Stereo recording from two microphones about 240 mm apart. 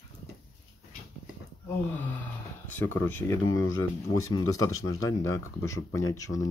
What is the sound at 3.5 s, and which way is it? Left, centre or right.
Speech, left.